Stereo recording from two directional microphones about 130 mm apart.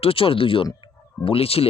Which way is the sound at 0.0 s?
45° left (ahead or behind).